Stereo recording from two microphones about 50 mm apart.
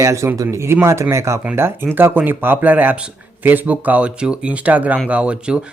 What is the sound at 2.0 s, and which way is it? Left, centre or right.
Speech, right.